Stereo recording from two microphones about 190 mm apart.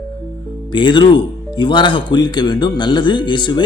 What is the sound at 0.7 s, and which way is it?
Speech, 25° left (ahead or behind).